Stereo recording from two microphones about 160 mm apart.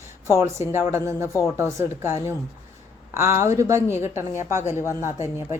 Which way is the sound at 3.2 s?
15° right (ahead or behind).